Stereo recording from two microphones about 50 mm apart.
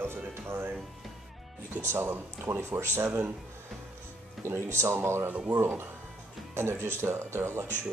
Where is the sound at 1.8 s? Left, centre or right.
Right.